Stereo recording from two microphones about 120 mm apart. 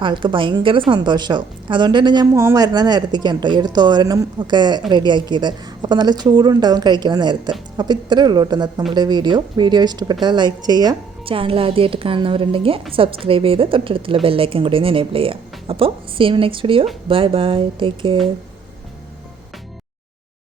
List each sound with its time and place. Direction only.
0.0 s a woman's voice: 45° right (ahead or behind)
2.3 s speech: 25° right (ahead or behind)
2.7 s a woman's voice: 35° right (ahead or behind)
11.3 s a woman's voice: 50° right (ahead or behind)